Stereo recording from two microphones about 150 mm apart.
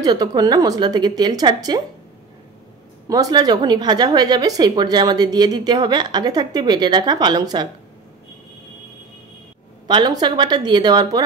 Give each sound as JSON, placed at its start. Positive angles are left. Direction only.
{"t": 0.0, "sound": "a woman's voice", "side_deg": -25}
{"t": 3.1, "sound": "a woman's voice", "side_deg": -25}
{"t": 9.8, "sound": "a woman's voice", "side_deg": -30}